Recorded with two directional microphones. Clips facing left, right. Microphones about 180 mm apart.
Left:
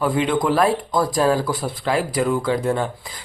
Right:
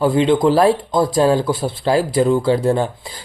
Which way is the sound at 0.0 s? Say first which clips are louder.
Right 6 dB; 30° right (ahead or behind).